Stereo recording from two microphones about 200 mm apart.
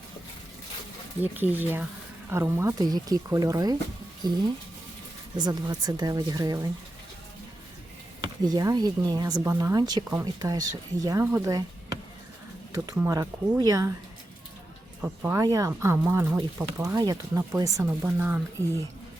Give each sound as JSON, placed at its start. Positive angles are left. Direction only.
{"t": 1.2, "sound": "speech", "side_deg": -10}
{"t": 5.4, "sound": "speech", "side_deg": -20}
{"t": 8.2, "sound": "speech", "side_deg": -20}
{"t": 12.7, "sound": "speech", "side_deg": -20}
{"t": 15.0, "sound": "speech", "side_deg": -10}